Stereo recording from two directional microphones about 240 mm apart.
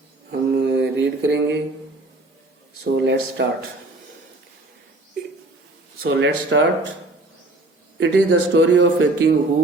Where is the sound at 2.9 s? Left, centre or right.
Right.